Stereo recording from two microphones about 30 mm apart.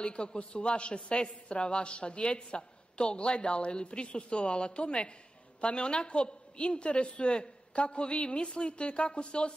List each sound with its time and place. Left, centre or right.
0.0 s a man's voice: left